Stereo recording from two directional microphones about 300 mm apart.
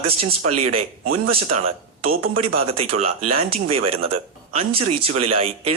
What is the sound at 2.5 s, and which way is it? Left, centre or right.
Speech, centre.